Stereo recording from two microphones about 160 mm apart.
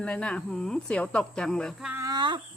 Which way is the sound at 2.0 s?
30° right (ahead or behind).